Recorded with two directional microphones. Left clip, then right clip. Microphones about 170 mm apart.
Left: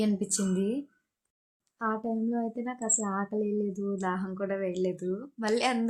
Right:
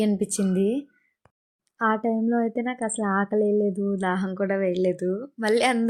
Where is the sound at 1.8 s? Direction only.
35° right (ahead or behind).